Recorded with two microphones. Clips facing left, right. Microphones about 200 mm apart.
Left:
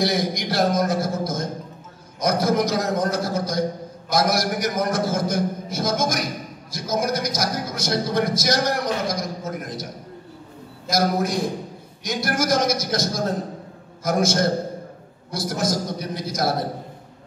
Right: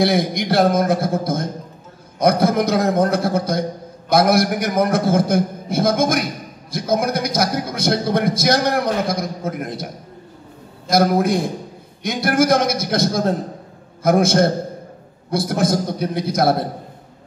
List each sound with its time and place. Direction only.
0.0 s a man's voice: 60° right (ahead or behind)
10.9 s a man's voice: 60° right (ahead or behind)